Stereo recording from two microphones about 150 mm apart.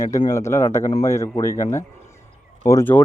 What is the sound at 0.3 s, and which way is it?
Speech, 20° left (ahead or behind).